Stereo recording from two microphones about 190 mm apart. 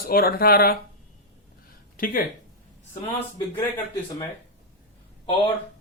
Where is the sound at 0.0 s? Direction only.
50° left (ahead or behind).